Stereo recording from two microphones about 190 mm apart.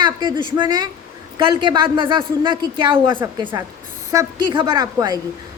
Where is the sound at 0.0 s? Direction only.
25° right (ahead or behind).